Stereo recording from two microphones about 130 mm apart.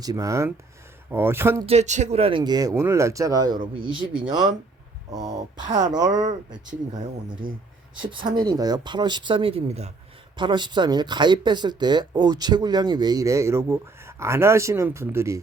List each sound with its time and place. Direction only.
0.0 s speech: 30° right (ahead or behind)
1.6 s speech: 55° right (ahead or behind)
2.4 s speech: 30° right (ahead or behind)
5.1 s speech: 30° right (ahead or behind)
7.4 s speech: 90° right
8.0 s speech: 40° right (ahead or behind); by 9.9 s 55° right (ahead or behind)
10.3 s speech: 35° right (ahead or behind); by 15.4 s 20° right (ahead or behind)